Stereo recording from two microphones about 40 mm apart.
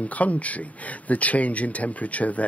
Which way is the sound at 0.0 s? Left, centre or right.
Left.